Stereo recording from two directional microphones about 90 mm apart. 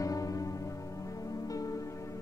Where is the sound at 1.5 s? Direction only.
40° left (ahead or behind).